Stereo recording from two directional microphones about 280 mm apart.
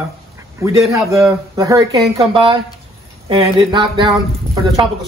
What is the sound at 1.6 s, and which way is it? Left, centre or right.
A man's voice, centre.